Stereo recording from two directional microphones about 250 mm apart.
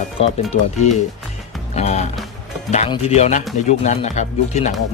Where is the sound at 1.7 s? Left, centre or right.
Left.